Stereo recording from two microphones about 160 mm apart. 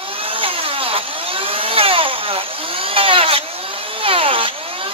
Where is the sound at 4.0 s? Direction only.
35° right (ahead or behind).